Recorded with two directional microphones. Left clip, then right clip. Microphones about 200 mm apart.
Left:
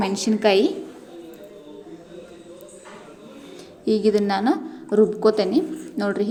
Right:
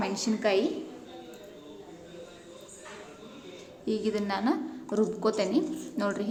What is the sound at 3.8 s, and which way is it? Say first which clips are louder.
A woman's voice: left 11 dB; 25° left (ahead or behind).